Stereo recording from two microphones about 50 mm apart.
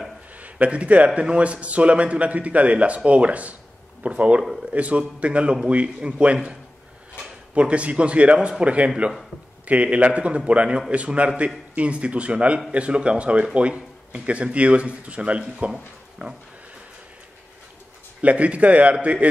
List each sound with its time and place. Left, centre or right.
0.4 s a man's voice: right
18.2 s a man's voice: right